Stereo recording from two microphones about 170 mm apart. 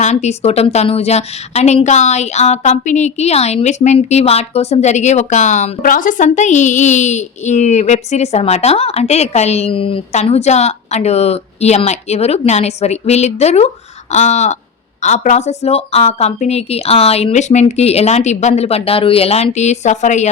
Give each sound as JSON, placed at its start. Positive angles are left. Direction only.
{"t": 0.0, "sound": "a woman's voice", "side_deg": 40}
{"t": 14.1, "sound": "a sound", "side_deg": 45}
{"t": 15.0, "sound": "a woman's voice", "side_deg": 45}